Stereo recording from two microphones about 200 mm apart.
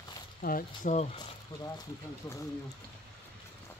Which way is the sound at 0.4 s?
45° left (ahead or behind).